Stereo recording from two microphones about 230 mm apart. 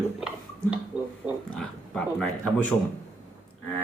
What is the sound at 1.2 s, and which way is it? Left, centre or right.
Speech, centre.